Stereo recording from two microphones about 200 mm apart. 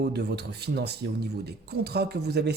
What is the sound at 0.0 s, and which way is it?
Speech, 55° right (ahead or behind).